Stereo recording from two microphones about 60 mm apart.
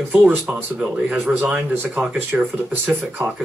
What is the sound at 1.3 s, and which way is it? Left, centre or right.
Speech, centre.